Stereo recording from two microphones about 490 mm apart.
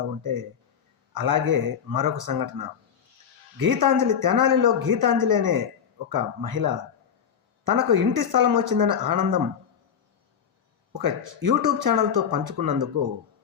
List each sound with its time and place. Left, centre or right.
0.2 s a man's voice: right
3.7 s speech: right
10.9 s speech: right